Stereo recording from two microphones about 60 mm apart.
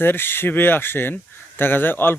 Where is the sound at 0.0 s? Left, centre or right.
Left.